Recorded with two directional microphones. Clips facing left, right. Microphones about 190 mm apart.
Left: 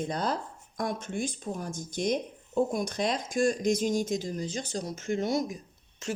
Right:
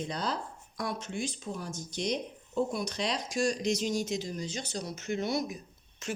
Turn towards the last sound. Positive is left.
turn(degrees=40)  # may be behind; listen again after turning